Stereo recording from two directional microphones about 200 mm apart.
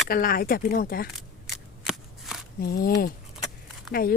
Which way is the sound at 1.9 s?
Centre (ahead or behind).